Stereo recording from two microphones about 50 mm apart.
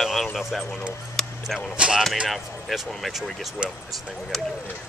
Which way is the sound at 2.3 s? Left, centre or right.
Centre.